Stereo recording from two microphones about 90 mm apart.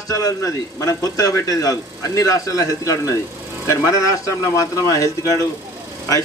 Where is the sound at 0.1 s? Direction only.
35° left (ahead or behind).